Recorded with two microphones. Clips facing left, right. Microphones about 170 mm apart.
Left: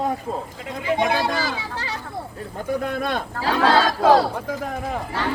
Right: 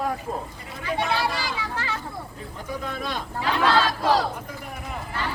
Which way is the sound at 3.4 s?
40° left (ahead or behind).